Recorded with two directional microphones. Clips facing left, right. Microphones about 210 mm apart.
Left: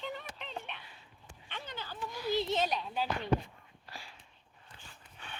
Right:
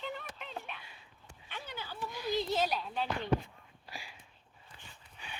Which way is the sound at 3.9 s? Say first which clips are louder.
Right 1 dB; 15° right (ahead or behind).